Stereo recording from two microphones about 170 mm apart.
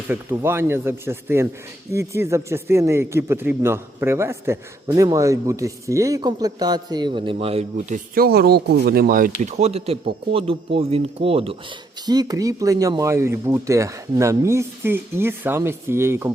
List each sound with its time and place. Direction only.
0.1 s speech: 15° right (ahead or behind); by 9.3 s 55° right (ahead or behind)
9.4 s a man's voice: 40° right (ahead or behind)
12.0 s speech: 25° right (ahead or behind)